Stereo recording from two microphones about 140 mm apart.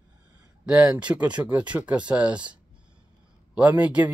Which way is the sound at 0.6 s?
5° right (ahead or behind).